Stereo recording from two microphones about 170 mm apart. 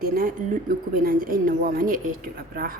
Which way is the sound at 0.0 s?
60° right (ahead or behind).